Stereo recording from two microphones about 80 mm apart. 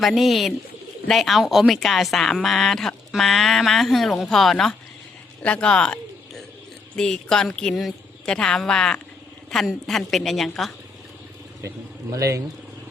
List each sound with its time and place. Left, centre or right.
0.0 s a woman's voice: centre
12.1 s speech: right